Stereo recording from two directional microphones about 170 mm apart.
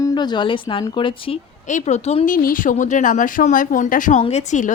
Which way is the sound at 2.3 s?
55° left (ahead or behind).